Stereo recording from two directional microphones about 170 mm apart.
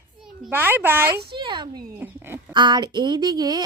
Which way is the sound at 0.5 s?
10° right (ahead or behind).